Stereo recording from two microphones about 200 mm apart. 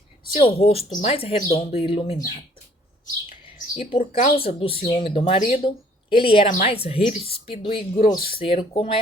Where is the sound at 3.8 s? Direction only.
25° left (ahead or behind).